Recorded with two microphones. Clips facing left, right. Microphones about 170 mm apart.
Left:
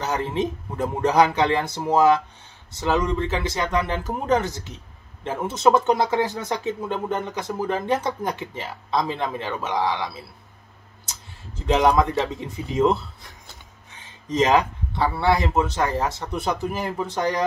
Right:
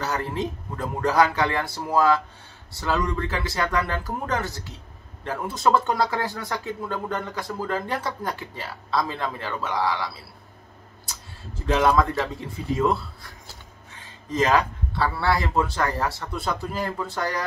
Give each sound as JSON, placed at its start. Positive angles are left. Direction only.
{"t": 0.0, "sound": "speech", "side_deg": 20}